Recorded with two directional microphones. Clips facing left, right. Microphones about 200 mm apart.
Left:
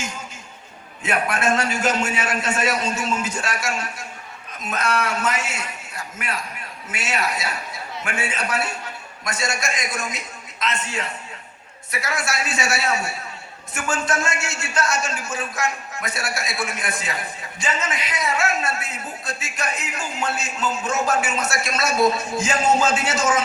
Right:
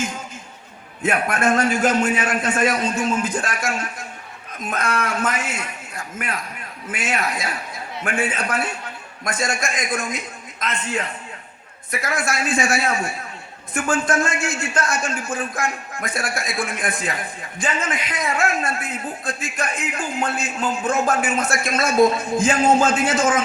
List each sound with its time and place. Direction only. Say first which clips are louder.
1.0 s a man's voice: right 2 dB; 55° right (ahead or behind)
4.7 s a man's voice: even; 55° right (ahead or behind)
7.0 s a man's voice: right 1 dB; 55° right (ahead or behind)